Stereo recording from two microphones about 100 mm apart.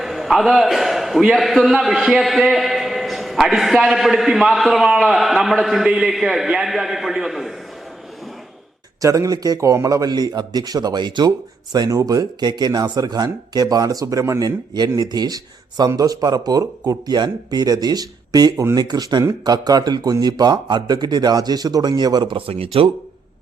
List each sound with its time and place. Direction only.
0.0 s a man's voice: centre (ahead or behind)
9.0 s a man's voice: 35° right (ahead or behind); by 22.9 s 70° right (ahead or behind)